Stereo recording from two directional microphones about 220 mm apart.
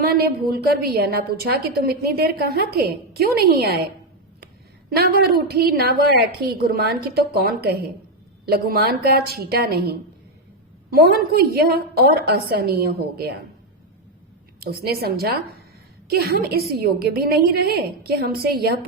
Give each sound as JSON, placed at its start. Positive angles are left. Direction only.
{"t": 0.0, "sound": "a woman's voice", "side_deg": -45}
{"t": 4.9, "sound": "a woman's voice", "side_deg": -45}
{"t": 14.6, "sound": "a woman's voice", "side_deg": -45}